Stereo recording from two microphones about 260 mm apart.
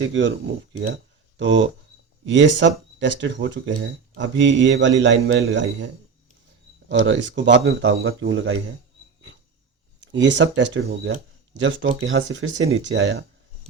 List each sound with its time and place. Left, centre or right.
0.0 s speech: right
1.4 s speech: right
10.1 s speech: right